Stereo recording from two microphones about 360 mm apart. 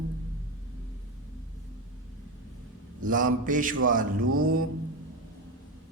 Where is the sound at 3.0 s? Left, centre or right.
Right.